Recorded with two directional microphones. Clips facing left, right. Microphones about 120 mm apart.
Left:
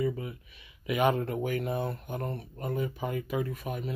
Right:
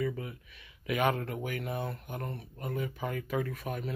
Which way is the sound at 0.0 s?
25° left (ahead or behind).